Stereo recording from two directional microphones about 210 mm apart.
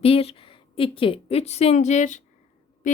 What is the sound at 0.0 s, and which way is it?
A woman's voice, 25° left (ahead or behind).